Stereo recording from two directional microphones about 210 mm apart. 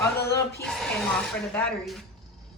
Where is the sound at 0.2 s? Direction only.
50° left (ahead or behind).